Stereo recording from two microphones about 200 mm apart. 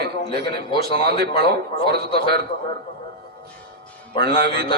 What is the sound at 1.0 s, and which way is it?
A man's voice, 50° right (ahead or behind).